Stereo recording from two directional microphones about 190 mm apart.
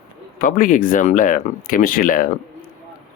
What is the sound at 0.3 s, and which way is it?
Speech, 45° left (ahead or behind).